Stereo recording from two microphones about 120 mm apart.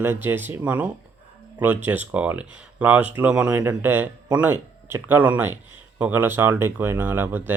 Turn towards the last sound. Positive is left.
turn(degrees=-15)  # may be behind; listen again after turning